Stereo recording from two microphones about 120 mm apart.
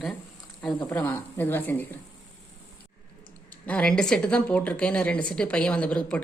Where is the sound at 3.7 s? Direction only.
10° left (ahead or behind).